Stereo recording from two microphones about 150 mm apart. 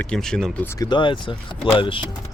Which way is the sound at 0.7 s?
25° left (ahead or behind).